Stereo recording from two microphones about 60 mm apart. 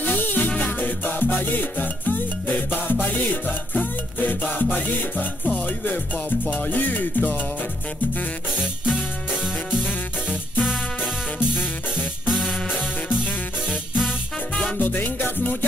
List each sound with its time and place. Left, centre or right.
0.0 s music: left
8.8 s music: centre
11.3 s music: centre
14.8 s music: left